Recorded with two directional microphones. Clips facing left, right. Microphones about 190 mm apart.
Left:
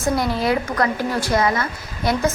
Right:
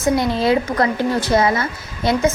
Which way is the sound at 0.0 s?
25° right (ahead or behind).